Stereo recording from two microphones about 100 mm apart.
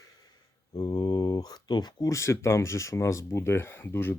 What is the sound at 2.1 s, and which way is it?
Speech, 30° left (ahead or behind).